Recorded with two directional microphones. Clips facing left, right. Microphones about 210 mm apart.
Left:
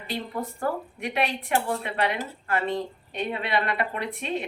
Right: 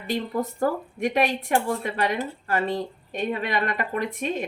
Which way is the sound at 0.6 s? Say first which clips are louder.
Right 5 dB; 40° right (ahead or behind).